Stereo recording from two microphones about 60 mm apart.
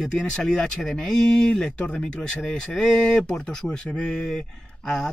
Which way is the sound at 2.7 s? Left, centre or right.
Centre.